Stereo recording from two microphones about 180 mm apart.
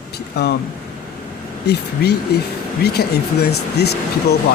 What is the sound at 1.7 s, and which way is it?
Speech, 65° left (ahead or behind).